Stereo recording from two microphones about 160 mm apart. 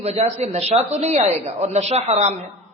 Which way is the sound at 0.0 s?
40° right (ahead or behind).